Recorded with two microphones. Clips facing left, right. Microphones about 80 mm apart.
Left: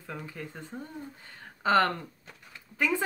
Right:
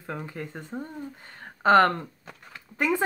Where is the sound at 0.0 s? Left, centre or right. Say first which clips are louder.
Right 5 dB; right.